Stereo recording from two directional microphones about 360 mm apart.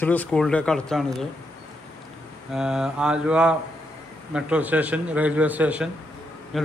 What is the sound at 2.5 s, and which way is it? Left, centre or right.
A man's voice, centre.